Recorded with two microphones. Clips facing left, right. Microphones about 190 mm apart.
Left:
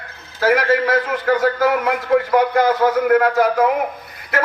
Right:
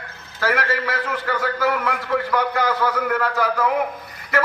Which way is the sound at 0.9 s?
45° left (ahead or behind).